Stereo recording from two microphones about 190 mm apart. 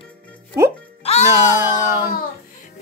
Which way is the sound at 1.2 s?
15° right (ahead or behind).